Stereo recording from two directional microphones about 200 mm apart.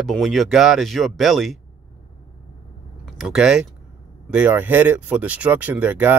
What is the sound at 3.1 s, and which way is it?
Speech, centre (ahead or behind).